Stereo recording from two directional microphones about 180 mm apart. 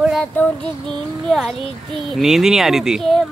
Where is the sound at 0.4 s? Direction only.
10° left (ahead or behind).